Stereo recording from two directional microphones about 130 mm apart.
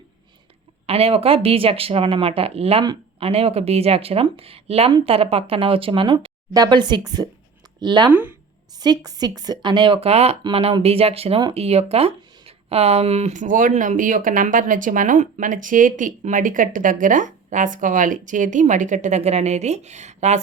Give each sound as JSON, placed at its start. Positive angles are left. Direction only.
{"t": 0.9, "sound": "speech", "side_deg": -45}
{"t": 8.1, "sound": "speech", "side_deg": -15}
{"t": 9.0, "sound": "speech", "side_deg": -30}